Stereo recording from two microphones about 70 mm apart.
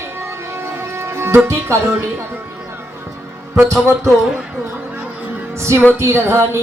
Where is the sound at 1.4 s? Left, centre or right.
Right.